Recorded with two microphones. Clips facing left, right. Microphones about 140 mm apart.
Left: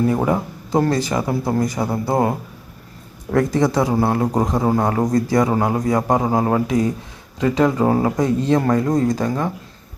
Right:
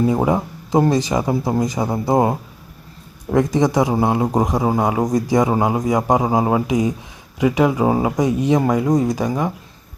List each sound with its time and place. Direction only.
0.0 s a man's voice: 20° right (ahead or behind)
3.3 s a man's voice: 15° right (ahead or behind)